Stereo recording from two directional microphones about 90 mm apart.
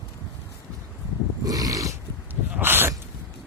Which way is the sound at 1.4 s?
45° right (ahead or behind).